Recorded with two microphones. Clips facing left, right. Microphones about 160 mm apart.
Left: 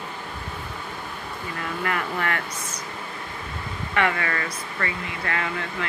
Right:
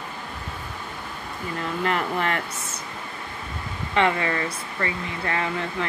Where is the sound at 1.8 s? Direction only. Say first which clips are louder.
Right 3 dB; 25° right (ahead or behind).